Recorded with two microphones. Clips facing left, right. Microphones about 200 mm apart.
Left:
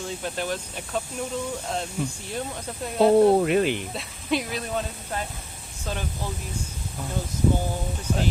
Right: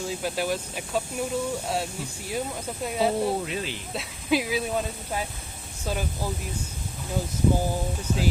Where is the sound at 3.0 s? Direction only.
55° left (ahead or behind).